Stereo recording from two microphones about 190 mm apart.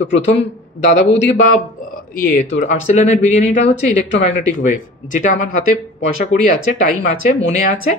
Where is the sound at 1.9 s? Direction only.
45° left (ahead or behind).